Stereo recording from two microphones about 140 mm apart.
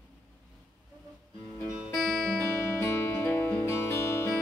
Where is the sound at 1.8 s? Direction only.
5° left (ahead or behind).